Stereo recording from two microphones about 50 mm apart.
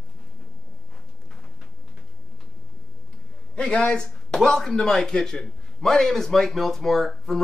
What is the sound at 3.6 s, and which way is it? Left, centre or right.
A man's voice, left.